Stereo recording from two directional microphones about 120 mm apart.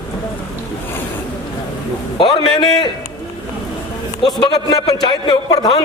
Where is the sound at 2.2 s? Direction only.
40° left (ahead or behind).